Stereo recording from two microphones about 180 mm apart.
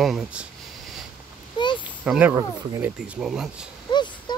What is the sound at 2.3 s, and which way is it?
Speech, 20° right (ahead or behind).